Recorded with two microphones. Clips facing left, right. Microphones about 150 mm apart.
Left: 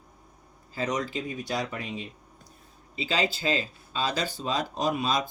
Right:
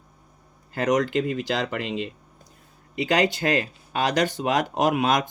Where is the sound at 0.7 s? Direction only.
70° right (ahead or behind).